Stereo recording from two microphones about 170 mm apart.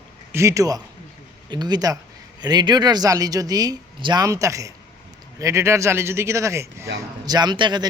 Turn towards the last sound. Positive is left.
turn(degrees=-25)  # may be behind; listen again after turning